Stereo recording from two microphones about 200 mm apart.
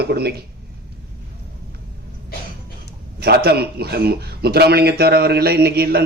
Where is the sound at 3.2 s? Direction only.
50° right (ahead or behind).